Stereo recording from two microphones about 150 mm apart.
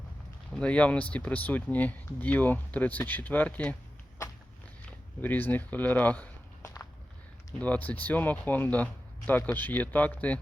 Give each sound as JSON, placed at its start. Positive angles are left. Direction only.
{"t": 0.5, "sound": "speech", "side_deg": 10}
{"t": 4.9, "sound": "speech", "side_deg": 10}